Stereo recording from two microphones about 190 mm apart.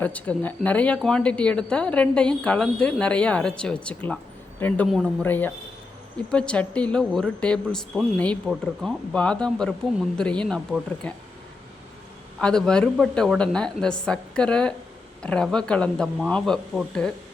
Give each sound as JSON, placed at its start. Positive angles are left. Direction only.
{"t": 0.0, "sound": "speech", "side_deg": 10}
{"t": 5.2, "sound": "speech", "side_deg": 10}
{"t": 12.4, "sound": "speech", "side_deg": 5}